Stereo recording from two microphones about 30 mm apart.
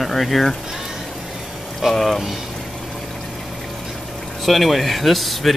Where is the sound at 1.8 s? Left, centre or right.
Centre.